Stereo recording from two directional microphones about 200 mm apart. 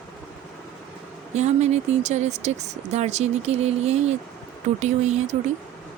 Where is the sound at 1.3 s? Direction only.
35° right (ahead or behind).